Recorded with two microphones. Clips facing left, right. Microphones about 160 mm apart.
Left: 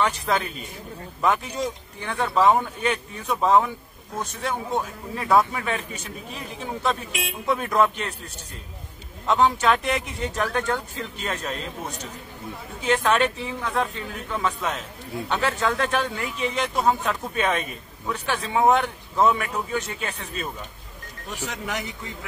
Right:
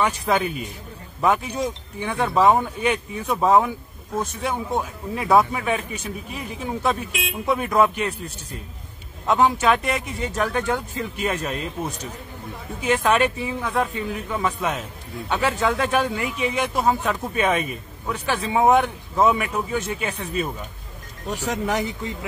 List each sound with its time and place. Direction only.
0.0 s a man's voice: 10° right (ahead or behind)
9.2 s a man's voice: 5° right (ahead or behind)
12.8 s a man's voice: 5° right (ahead or behind)
21.3 s speech: 35° right (ahead or behind)